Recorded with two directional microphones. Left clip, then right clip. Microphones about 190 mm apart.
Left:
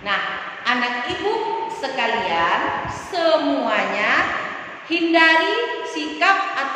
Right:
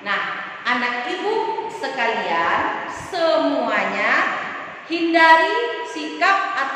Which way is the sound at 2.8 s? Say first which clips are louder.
Even; 10° left (ahead or behind).